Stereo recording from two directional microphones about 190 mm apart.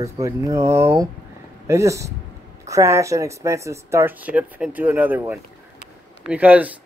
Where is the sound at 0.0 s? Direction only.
15° right (ahead or behind).